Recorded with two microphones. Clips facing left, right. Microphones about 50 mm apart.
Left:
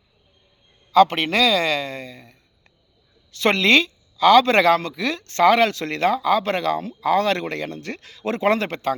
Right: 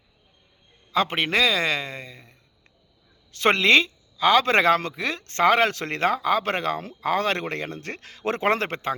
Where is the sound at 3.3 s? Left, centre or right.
Right.